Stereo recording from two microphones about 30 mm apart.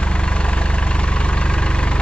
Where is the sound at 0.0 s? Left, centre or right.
Left.